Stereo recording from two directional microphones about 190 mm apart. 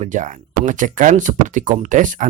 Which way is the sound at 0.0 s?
40° right (ahead or behind).